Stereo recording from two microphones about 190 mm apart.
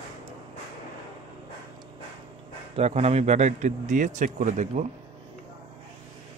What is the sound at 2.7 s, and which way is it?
Speech, 35° right (ahead or behind).